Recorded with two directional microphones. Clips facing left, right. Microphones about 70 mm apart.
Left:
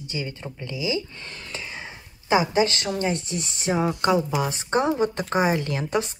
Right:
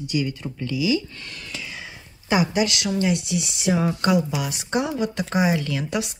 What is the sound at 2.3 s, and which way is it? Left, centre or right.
Speech, left.